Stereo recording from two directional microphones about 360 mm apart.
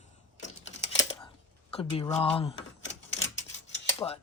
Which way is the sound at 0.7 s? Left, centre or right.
Left.